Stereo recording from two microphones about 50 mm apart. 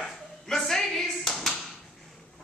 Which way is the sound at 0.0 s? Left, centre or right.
Centre.